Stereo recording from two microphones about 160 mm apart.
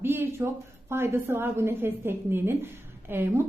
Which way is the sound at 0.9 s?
15° right (ahead or behind).